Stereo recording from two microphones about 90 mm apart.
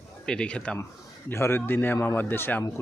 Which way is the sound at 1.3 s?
25° left (ahead or behind).